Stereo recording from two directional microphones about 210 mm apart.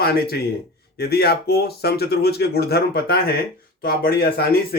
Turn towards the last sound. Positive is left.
turn(degrees=50)  # may be behind; listen again after turning